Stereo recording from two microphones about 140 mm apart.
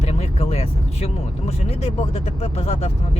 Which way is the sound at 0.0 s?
45° left (ahead or behind).